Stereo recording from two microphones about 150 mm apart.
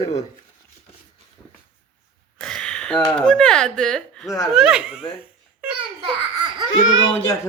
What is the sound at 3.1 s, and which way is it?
Speech, 5° left (ahead or behind).